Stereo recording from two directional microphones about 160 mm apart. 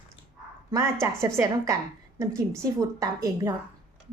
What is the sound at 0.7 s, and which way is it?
A woman's voice, 15° right (ahead or behind).